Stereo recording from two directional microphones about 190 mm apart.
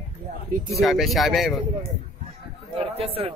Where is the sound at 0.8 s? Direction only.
Centre (ahead or behind).